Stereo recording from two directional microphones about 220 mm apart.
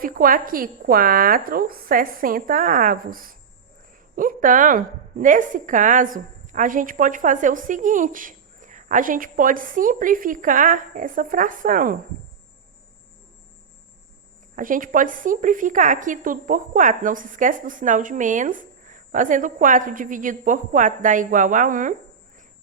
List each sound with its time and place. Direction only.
0.0 s a woman's voice: 40° right (ahead or behind)
14.5 s a woman's voice: 40° right (ahead or behind)